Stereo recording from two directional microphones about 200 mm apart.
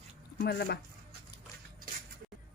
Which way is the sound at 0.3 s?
50° left (ahead or behind).